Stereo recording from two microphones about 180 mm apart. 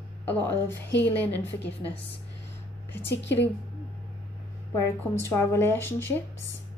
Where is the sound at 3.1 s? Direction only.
80° left.